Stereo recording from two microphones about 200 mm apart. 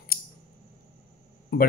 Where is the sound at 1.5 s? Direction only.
50° left (ahead or behind).